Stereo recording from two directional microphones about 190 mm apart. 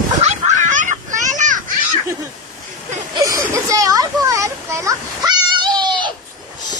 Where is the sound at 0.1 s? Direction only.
40° right (ahead or behind).